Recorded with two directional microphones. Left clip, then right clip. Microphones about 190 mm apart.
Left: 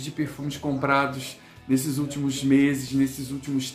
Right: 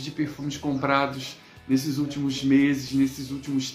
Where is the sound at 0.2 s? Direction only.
Centre (ahead or behind).